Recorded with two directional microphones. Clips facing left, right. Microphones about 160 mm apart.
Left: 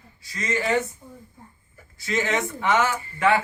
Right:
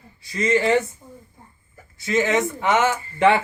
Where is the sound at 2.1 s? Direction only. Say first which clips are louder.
Right 5 dB; 20° right (ahead or behind).